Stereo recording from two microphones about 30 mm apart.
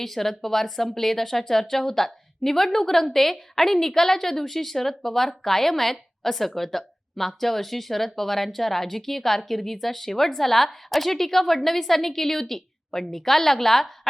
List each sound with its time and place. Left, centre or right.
0.0 s a woman's voice: centre